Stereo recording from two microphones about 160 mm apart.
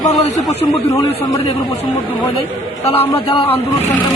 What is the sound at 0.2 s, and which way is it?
Speech, 45° left (ahead or behind).